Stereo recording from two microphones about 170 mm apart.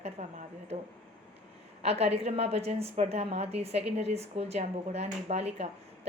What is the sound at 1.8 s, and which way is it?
A woman's voice, 35° right (ahead or behind).